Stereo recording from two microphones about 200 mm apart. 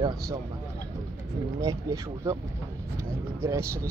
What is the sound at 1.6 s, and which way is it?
Speech, 15° right (ahead or behind).